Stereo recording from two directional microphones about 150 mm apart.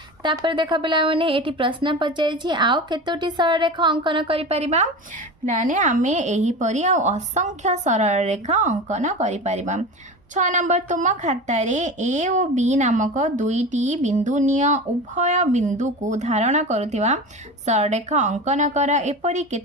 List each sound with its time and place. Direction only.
0.2 s a woman's voice: 30° right (ahead or behind); by 4.9 s 45° right (ahead or behind)
5.5 s a woman's voice: 60° right (ahead or behind)